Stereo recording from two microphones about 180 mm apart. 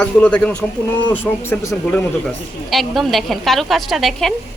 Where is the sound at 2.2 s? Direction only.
Centre (ahead or behind).